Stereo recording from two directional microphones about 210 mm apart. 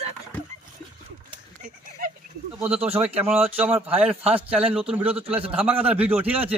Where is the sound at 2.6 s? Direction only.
5° right (ahead or behind).